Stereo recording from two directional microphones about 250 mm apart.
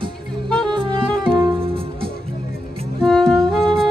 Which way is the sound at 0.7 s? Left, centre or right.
Centre.